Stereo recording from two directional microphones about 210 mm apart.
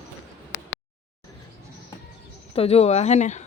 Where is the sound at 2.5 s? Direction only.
30° left (ahead or behind).